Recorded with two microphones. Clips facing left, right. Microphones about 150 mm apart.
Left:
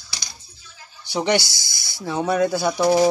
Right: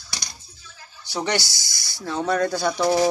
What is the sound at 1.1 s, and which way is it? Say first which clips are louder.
Speech: left 5 dB; 15° left (ahead or behind).